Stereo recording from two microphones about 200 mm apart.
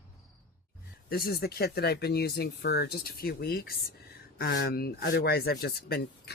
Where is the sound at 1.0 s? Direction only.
50° left (ahead or behind).